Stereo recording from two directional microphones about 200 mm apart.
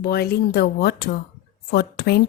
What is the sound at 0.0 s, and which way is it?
A woman's voice, 50° left (ahead or behind).